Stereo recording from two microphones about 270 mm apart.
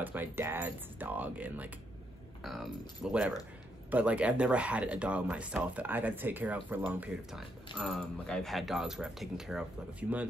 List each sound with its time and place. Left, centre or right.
0.0 s speech: centre